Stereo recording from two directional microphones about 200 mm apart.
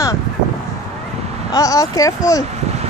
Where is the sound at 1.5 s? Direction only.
15° left (ahead or behind).